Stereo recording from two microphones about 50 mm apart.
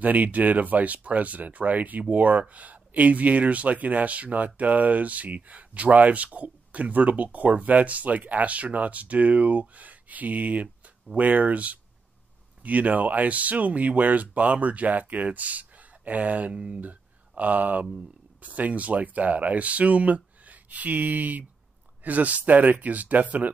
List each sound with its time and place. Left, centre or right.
0.0 s speech: right
17.4 s speech: right